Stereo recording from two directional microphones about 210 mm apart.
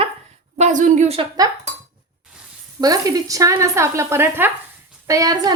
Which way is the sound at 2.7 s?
15° right (ahead or behind).